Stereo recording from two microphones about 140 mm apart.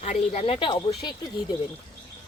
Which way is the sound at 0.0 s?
50° left (ahead or behind).